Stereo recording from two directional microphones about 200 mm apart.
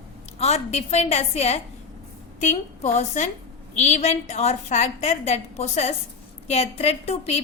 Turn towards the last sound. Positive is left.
turn(degrees=30)  # may be behind; listen again after turning